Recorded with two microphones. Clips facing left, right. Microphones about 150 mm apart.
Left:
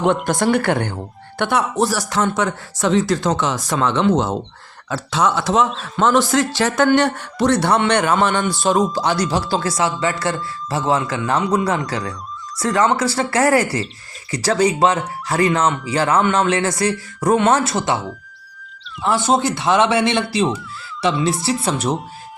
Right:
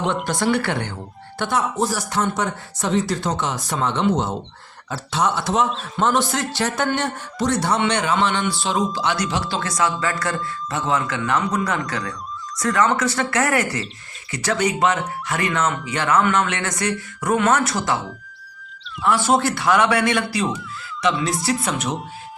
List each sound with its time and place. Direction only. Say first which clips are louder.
0.3 s speech: left 4 dB; 50° left (ahead or behind)
1.4 s speech: left 3 dB; 65° left (ahead or behind); by 17.9 s 25° left (ahead or behind)
19.0 s speech: left 1 dB; 25° left (ahead or behind)